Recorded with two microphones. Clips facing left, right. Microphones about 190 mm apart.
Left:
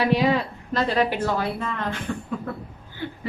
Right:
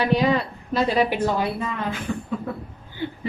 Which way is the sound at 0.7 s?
10° right (ahead or behind).